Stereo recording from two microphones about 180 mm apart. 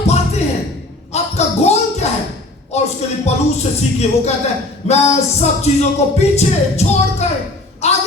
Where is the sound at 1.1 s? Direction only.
35° left (ahead or behind).